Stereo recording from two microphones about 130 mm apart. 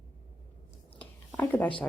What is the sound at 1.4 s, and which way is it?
Speech, 15° left (ahead or behind).